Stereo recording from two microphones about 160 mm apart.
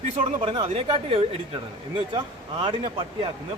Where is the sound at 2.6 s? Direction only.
30° right (ahead or behind).